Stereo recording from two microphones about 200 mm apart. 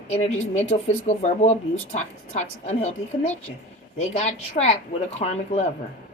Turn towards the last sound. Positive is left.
turn(degrees=35)  # may be behind; listen again after turning